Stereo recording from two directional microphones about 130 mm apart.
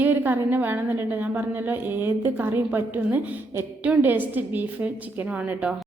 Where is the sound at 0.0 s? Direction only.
15° right (ahead or behind).